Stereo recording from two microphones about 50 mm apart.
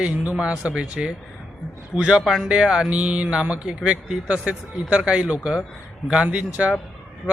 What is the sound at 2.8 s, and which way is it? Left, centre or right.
Speech, right.